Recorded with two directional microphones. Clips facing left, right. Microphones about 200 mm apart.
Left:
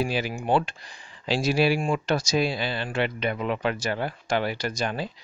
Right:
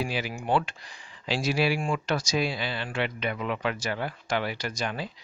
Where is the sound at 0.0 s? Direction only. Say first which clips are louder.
Left 4 dB; 35° left (ahead or behind).